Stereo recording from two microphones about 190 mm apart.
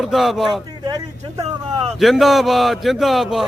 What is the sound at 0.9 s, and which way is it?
Speech, 20° right (ahead or behind).